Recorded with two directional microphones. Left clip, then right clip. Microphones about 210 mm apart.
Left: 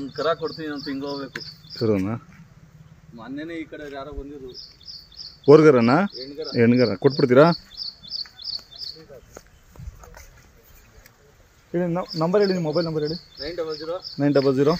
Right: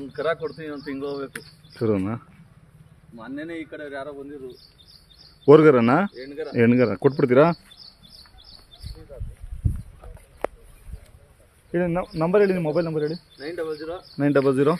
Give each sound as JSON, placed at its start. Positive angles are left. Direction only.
{"t": 0.1, "sound": "speech", "side_deg": -25}
{"t": 0.8, "sound": "speech", "side_deg": -40}
{"t": 1.7, "sound": "speech", "side_deg": 0}
{"t": 3.2, "sound": "speech", "side_deg": -40}
{"t": 5.4, "sound": "speech", "side_deg": -5}
{"t": 8.4, "sound": "a sound", "side_deg": -10}
{"t": 11.7, "sound": "a man's voice", "side_deg": -15}
{"t": 13.4, "sound": "speech", "side_deg": -25}
{"t": 14.1, "sound": "speech", "side_deg": -5}